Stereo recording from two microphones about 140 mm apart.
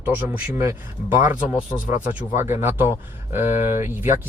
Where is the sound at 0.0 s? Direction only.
15° right (ahead or behind).